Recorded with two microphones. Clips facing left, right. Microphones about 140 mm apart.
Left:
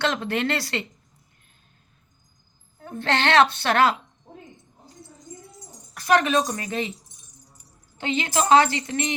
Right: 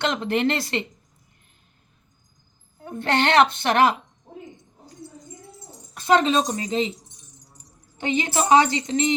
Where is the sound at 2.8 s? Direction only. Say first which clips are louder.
Right 2 dB; 20° right (ahead or behind).